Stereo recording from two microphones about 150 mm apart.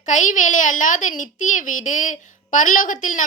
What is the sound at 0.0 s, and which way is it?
A woman's voice, 55° left (ahead or behind).